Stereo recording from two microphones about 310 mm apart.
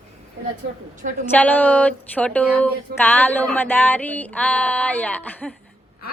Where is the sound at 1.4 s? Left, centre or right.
Centre.